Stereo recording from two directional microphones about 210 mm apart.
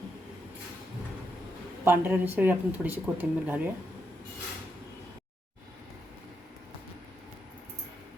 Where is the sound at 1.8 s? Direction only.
10° right (ahead or behind).